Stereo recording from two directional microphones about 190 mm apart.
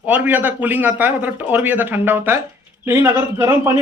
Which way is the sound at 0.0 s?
10° right (ahead or behind).